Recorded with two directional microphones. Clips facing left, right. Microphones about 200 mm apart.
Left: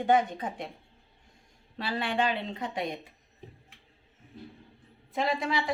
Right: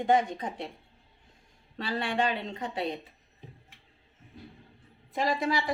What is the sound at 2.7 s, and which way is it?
Speech, 35° right (ahead or behind).